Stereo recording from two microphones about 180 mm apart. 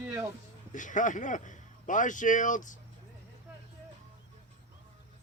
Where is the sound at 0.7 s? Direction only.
45° left (ahead or behind).